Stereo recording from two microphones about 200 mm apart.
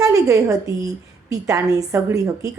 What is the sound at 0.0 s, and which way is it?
A woman's voice, 15° right (ahead or behind).